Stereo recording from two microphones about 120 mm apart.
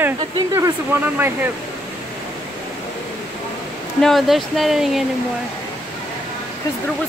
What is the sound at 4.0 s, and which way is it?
Speech, centre (ahead or behind).